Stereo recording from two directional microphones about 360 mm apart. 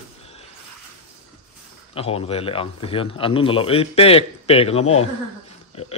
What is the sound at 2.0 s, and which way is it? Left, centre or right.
Speech, centre.